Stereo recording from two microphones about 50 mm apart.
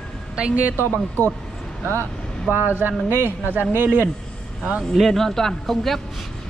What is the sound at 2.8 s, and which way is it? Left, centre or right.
A woman's voice, right.